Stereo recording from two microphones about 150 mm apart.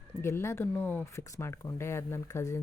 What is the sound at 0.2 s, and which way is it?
Speech, 15° left (ahead or behind).